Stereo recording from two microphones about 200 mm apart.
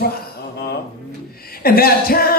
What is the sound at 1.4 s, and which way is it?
Speech, 50° left (ahead or behind).